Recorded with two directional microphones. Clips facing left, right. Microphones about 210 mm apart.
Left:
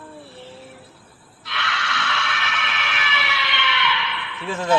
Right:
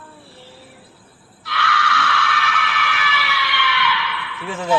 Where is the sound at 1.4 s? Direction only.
20° left (ahead or behind).